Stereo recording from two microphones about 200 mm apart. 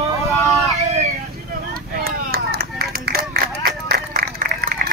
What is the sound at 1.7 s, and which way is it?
Run, 50° right (ahead or behind).